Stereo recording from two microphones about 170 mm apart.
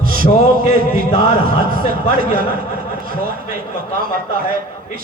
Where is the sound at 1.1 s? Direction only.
35° left (ahead or behind).